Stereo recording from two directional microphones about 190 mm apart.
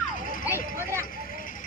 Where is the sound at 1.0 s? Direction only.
45° left (ahead or behind).